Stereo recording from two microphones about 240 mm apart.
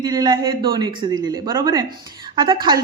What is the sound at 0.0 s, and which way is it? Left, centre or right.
A woman's voice, centre.